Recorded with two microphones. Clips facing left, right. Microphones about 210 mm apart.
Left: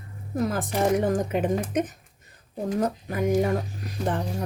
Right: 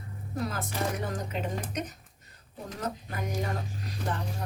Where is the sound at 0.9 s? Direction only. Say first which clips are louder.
Left 11 dB; 50° left (ahead or behind).